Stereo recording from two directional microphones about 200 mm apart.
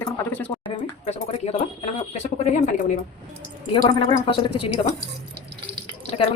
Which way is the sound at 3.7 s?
25° left (ahead or behind).